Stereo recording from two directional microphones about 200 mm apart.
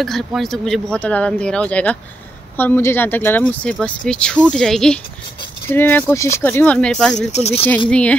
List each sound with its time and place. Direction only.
0.0 s speech: centre (ahead or behind)
7.3 s speech: 30° left (ahead or behind)
7.9 s speech: 5° left (ahead or behind)